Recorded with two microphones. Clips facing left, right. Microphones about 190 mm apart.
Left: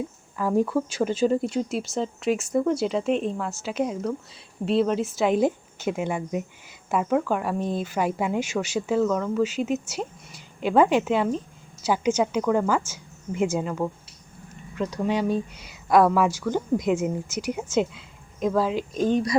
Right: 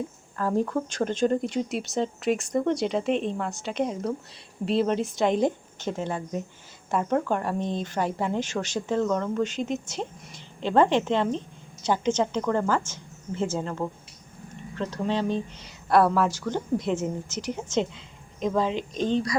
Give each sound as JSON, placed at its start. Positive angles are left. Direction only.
{"t": 0.3, "sound": "speech", "side_deg": 10}